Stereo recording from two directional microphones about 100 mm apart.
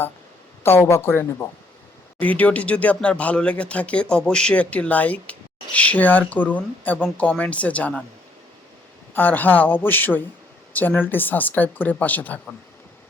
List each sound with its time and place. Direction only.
0.6 s a man's voice: 25° left (ahead or behind)
9.1 s a man's voice: 15° left (ahead or behind)